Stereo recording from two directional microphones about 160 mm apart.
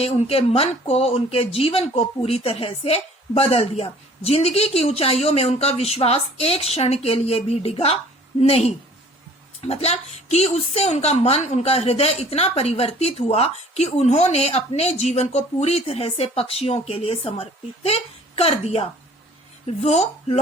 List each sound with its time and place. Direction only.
0.0 s a woman's voice: 40° left (ahead or behind)